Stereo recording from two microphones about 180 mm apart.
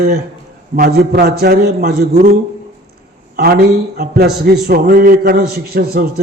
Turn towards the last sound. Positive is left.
turn(degrees=-60)  # may be behind; listen again after turning